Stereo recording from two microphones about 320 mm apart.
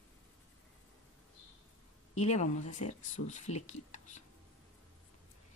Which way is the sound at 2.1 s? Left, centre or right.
Left.